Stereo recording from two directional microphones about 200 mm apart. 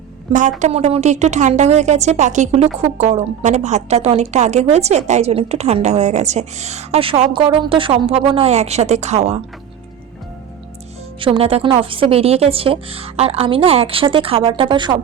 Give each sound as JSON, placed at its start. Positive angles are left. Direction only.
{"t": 0.6, "sound": "a woman's voice", "side_deg": -30}
{"t": 11.2, "sound": "a woman's voice", "side_deg": -30}